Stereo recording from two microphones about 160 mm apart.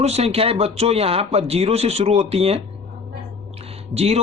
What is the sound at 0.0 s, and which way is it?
Speech, 40° right (ahead or behind).